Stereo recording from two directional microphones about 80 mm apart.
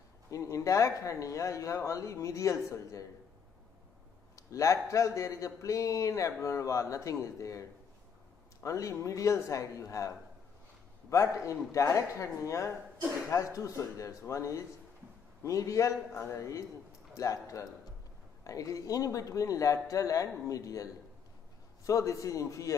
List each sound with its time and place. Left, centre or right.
0.3 s speech: left
4.4 s a man's voice: left